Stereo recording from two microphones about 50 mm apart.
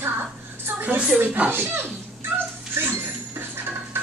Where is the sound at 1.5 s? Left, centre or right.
Right.